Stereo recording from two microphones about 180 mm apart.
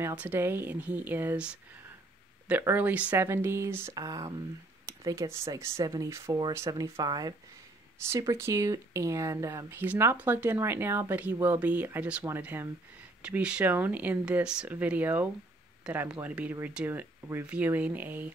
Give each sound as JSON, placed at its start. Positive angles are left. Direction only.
{"t": 0.0, "sound": "speech", "side_deg": -10}